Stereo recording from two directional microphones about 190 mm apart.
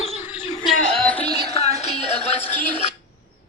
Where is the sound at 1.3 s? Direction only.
35° left (ahead or behind).